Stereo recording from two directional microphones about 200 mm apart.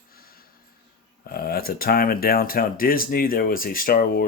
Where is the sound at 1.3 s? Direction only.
50° left (ahead or behind).